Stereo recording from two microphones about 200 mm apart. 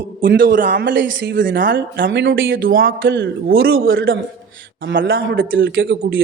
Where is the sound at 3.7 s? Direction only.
50° right (ahead or behind).